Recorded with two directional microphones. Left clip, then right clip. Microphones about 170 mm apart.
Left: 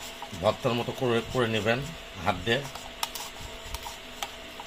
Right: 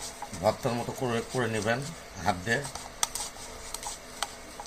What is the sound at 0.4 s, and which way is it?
Speech, 20° left (ahead or behind).